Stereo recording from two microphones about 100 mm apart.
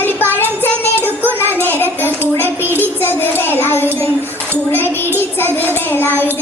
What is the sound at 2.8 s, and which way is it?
Child singing, 20° left (ahead or behind).